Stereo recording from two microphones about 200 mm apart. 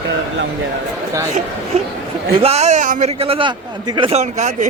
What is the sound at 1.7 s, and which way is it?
A man's voice, 35° right (ahead or behind).